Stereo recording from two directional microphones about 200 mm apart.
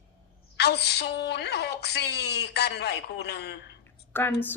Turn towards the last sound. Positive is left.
turn(degrees=10)  # may be behind; listen again after turning